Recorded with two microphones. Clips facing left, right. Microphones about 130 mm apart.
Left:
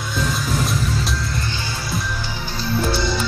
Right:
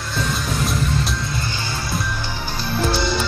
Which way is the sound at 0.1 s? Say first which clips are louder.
Left 1 dB; centre (ahead or behind).